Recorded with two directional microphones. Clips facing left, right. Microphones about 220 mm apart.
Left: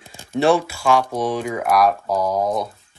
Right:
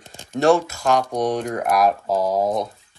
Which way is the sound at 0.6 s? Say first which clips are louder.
Left 2 dB; 45° right (ahead or behind).